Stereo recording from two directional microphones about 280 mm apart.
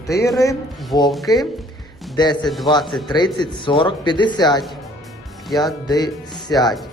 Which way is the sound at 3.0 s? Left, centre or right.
Centre.